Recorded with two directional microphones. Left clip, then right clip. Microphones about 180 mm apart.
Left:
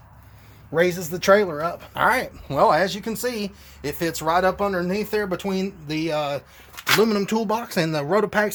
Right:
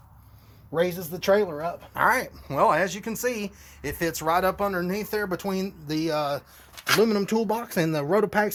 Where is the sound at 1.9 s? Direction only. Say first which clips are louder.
Left 2 dB; 10° right (ahead or behind).